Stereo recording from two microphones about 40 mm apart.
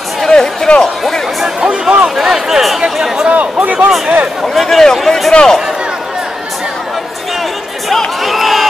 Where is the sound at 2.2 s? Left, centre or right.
Centre.